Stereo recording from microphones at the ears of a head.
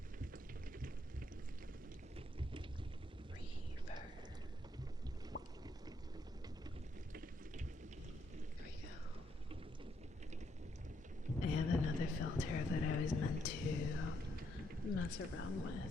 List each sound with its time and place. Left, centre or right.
11.4 s a woman's voice: left